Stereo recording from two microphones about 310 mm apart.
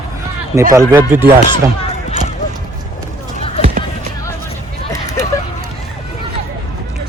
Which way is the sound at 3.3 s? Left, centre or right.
Centre.